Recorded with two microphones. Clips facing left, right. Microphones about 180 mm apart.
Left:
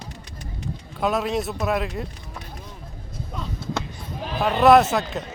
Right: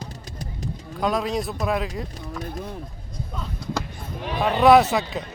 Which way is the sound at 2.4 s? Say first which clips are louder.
Right 8 dB; 60° right (ahead or behind).